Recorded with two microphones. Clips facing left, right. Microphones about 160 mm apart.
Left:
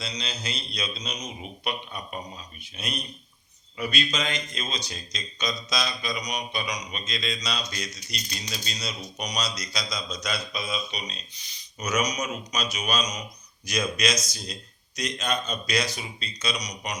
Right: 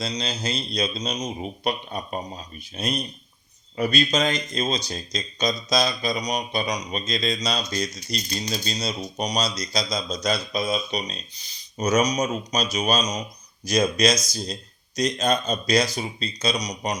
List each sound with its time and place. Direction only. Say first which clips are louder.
0.0 s speech: right 6 dB; 40° right (ahead or behind)